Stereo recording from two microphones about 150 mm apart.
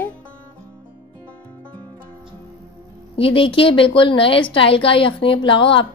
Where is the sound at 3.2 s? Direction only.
35° left (ahead or behind).